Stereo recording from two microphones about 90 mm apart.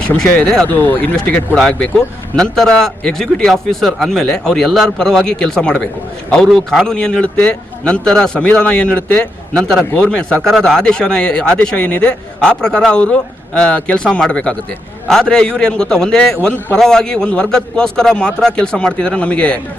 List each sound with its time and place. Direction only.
0.2 s speech: 5° left (ahead or behind)
0.7 s speech: 20° left (ahead or behind)
1.5 s a man's voice: 10° left (ahead or behind)